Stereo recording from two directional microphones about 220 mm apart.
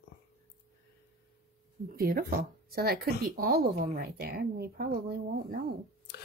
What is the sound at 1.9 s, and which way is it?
Speech, 40° right (ahead or behind).